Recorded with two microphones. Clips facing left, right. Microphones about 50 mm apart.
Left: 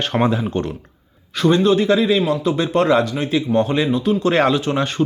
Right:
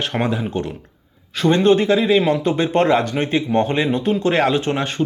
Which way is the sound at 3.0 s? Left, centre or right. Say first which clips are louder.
Even; right.